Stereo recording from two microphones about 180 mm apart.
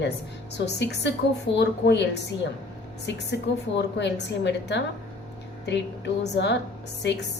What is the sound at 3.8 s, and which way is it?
A woman's voice, 75° left (ahead or behind).